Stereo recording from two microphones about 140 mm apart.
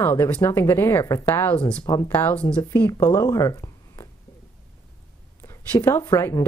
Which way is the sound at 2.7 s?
20° left (ahead or behind).